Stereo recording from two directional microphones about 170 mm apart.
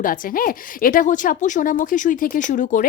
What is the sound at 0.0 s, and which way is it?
A woman's voice, 55° left (ahead or behind).